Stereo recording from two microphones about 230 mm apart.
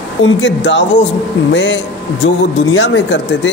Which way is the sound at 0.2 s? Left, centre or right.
Left.